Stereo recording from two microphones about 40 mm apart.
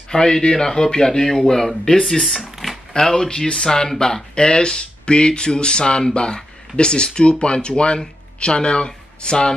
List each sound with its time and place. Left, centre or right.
0.1 s a man's voice: centre